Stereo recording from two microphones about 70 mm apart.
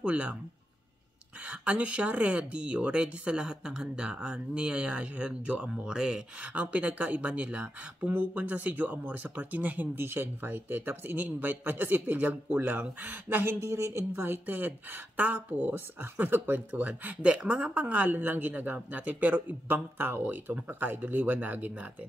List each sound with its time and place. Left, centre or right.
0.0 s speech: centre
1.4 s speech: centre; by 14.2 s right
14.2 s speech: right